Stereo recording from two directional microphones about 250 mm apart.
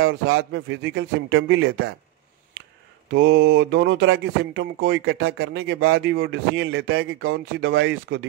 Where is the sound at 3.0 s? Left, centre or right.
Right.